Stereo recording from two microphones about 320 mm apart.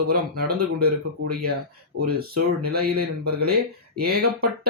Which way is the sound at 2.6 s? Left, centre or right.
Right.